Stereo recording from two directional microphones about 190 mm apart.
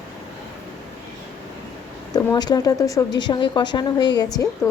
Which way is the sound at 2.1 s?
20° left (ahead or behind).